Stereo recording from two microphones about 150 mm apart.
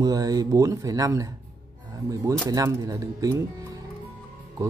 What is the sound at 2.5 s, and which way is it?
Speech, 20° right (ahead or behind).